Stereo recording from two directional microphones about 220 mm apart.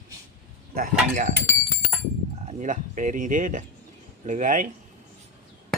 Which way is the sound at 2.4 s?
35° right (ahead or behind).